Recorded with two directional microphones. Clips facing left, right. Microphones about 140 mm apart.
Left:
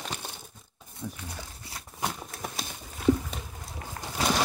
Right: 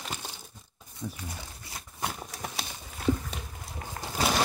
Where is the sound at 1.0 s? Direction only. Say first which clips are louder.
Even; 5° right (ahead or behind).